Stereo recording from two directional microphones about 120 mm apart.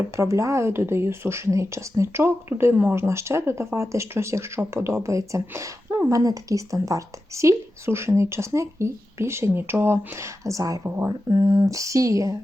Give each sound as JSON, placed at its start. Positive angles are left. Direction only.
{"t": 0.2, "sound": "speech", "side_deg": -25}